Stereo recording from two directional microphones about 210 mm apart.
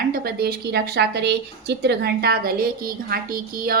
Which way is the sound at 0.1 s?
45° right (ahead or behind).